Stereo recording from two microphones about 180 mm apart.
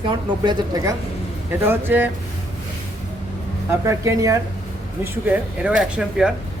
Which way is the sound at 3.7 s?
15° right (ahead or behind).